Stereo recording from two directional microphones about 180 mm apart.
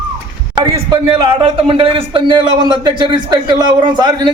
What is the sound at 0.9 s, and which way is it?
Speech, 25° right (ahead or behind).